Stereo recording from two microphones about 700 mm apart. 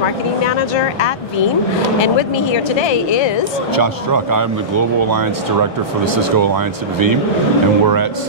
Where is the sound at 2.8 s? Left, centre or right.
Left.